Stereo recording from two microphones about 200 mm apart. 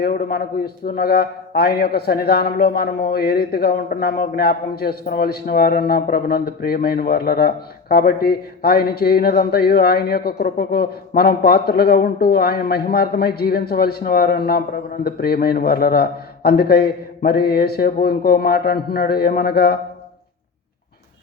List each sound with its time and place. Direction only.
0.0 s a man's voice: 50° left (ahead or behind)